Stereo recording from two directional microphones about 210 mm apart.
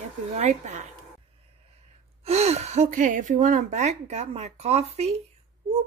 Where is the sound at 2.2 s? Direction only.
30° right (ahead or behind).